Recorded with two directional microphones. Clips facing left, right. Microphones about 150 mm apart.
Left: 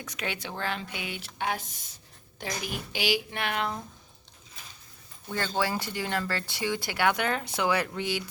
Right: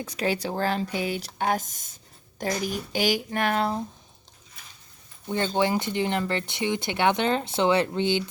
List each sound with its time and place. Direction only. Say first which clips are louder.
0.0 s speech: right 8 dB; 35° right (ahead or behind)
5.3 s speech: right 5 dB; 20° right (ahead or behind)